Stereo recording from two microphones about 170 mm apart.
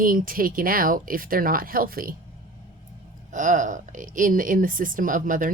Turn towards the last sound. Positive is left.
turn(degrees=-50)  # may be behind; listen again after turning